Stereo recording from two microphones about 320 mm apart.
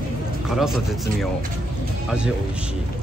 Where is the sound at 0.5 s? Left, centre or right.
Centre.